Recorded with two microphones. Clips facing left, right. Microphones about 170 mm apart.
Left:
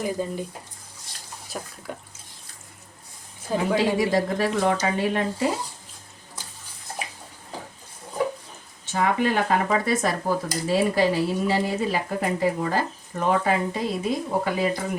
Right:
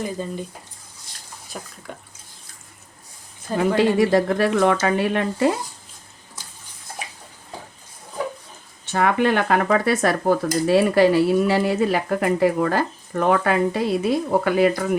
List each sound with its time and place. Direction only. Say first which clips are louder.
0.2 s speech: left 1 dB; 10° left (ahead or behind)
1.5 s speech: left 1 dB; centre (ahead or behind)
3.8 s speech: right 6 dB; 60° right (ahead or behind)
8.9 s speech: right 4 dB; 65° right (ahead or behind)